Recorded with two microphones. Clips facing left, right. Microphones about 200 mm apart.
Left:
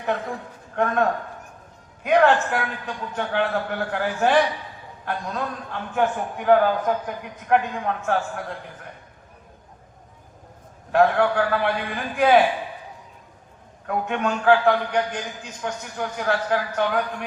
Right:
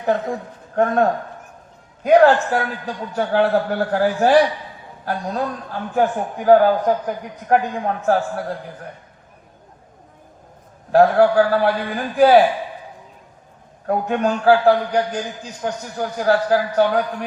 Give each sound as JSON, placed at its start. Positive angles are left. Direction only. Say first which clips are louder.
{"t": 0.0, "sound": "a man's voice", "louder": "right 6 dB", "side_deg": -40}
{"t": 2.0, "sound": "a man's voice", "louder": "right 5 dB", "side_deg": -35}
{"t": 10.9, "sound": "a man's voice", "louder": "right 6 dB", "side_deg": -35}
{"t": 13.8, "sound": "a man's voice", "louder": "right 5 dB", "side_deg": -35}